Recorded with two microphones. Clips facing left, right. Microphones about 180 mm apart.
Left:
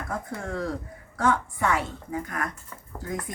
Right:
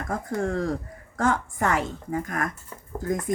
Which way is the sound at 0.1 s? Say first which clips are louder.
Right 7 dB; 45° right (ahead or behind).